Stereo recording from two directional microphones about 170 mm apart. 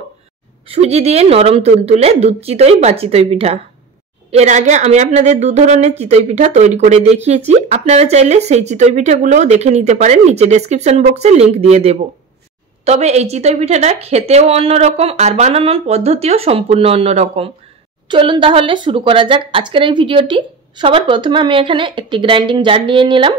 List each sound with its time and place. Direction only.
0.7 s a woman's voice: 35° right (ahead or behind)